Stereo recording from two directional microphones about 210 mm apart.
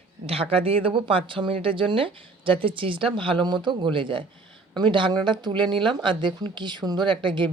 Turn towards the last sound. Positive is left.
turn(degrees=-20)  # may be behind; listen again after turning